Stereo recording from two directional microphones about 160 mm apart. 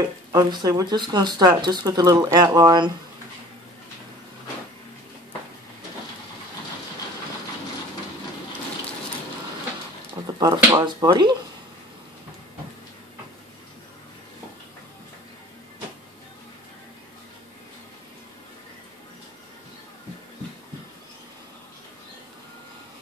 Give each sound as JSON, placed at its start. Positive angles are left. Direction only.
{"t": 0.3, "sound": "speech", "side_deg": -25}
{"t": 10.4, "sound": "a sound", "side_deg": -25}
{"t": 11.1, "sound": "speech", "side_deg": -30}